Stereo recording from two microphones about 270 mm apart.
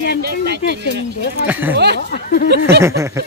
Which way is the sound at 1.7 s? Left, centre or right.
Right.